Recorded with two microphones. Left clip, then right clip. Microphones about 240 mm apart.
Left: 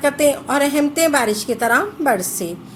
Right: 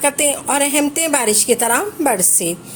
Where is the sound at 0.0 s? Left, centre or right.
Right.